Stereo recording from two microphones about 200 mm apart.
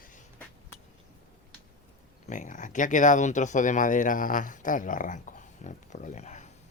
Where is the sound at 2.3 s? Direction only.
40° left (ahead or behind).